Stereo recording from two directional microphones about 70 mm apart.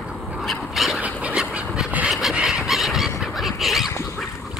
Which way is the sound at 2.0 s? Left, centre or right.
Centre.